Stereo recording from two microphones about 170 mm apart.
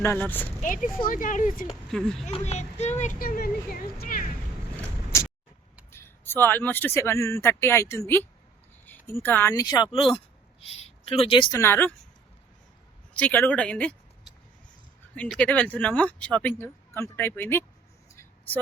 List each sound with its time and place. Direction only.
0.0 s speech: 15° left (ahead or behind)
0.6 s speech: 50° left (ahead or behind)
1.9 s speech: centre (ahead or behind)
2.2 s speech: 40° left (ahead or behind); by 4.3 s 60° left (ahead or behind)
5.9 s speech: 15° left (ahead or behind); by 11.4 s 35° left (ahead or behind)
11.5 s speech: 15° left (ahead or behind)
13.1 s speech: 10° left (ahead or behind)
15.3 s speech: 10° left (ahead or behind)
18.2 s vehicle: 10° left (ahead or behind)